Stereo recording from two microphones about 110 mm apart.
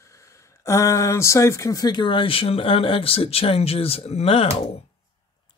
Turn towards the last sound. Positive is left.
turn(degrees=60)  # may be behind; listen again after turning